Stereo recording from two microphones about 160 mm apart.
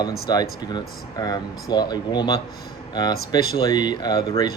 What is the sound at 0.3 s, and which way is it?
Speech, 25° left (ahead or behind).